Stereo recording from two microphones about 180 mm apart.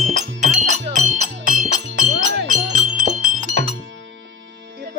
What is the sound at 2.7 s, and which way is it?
Wind chime, 45° right (ahead or behind).